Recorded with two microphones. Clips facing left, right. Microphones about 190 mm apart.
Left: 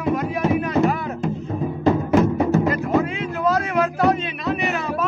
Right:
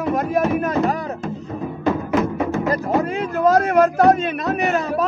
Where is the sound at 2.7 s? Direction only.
40° right (ahead or behind).